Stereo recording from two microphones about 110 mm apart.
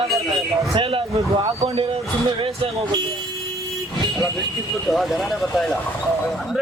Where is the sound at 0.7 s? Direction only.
55° right (ahead or behind).